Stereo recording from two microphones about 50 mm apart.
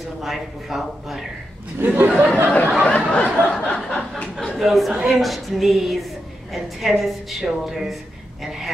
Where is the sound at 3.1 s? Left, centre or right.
Left.